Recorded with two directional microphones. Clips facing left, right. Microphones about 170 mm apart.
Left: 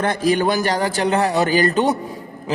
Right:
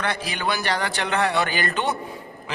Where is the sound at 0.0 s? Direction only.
45° left (ahead or behind).